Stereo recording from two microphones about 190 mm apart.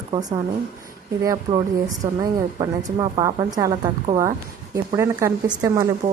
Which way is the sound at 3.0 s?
15° right (ahead or behind).